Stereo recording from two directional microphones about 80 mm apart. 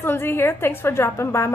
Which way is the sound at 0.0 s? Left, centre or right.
Left.